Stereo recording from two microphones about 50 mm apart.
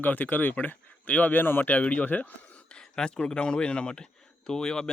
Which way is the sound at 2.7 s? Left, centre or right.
Centre.